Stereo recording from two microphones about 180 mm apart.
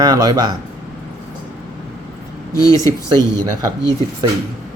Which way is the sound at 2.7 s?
15° left (ahead or behind).